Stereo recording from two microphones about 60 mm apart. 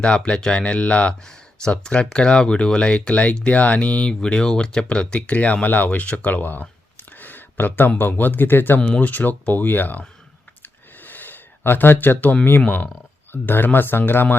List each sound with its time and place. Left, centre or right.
0.0 s speech: centre; by 10.0 s left
10.6 s a sound: left
12.6 s speech: left